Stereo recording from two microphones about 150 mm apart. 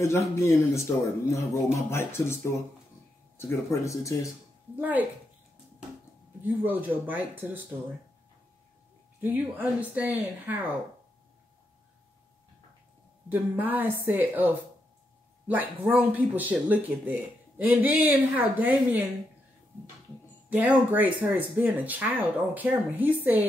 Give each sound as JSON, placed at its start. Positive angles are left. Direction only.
{"t": 0.0, "sound": "speech", "side_deg": 20}
{"t": 4.7, "sound": "speech", "side_deg": -10}
{"t": 6.4, "sound": "speech", "side_deg": -10}
{"t": 9.2, "sound": "speech", "side_deg": -10}
{"t": 13.3, "sound": "speech", "side_deg": -10}
{"t": 20.4, "sound": "speech", "side_deg": -10}